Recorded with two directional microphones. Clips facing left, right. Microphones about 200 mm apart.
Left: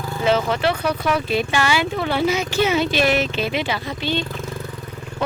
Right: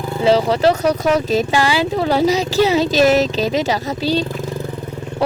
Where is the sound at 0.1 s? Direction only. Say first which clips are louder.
Right 5 dB; 30° right (ahead or behind).